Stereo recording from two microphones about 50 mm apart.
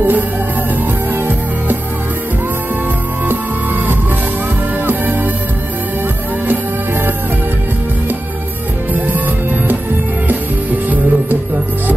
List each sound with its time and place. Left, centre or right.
4.8 s music: right
10.2 s music: right